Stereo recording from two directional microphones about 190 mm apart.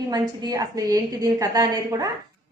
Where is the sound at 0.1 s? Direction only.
20° right (ahead or behind).